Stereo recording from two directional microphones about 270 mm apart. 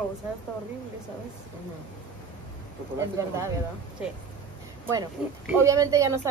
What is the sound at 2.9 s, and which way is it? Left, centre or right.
Speech, centre.